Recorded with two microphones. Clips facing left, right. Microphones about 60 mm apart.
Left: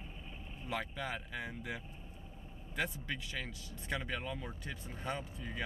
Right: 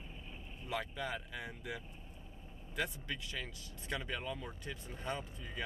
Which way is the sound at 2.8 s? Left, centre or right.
Centre.